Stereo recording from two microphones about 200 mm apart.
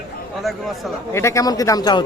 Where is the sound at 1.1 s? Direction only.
15° left (ahead or behind).